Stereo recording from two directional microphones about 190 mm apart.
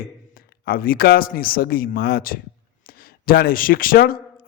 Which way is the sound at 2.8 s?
50° left (ahead or behind).